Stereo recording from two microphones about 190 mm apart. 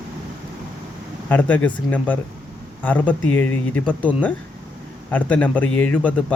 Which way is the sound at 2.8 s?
10° left (ahead or behind).